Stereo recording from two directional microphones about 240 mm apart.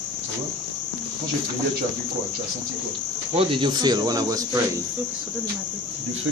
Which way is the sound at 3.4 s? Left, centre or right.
Right.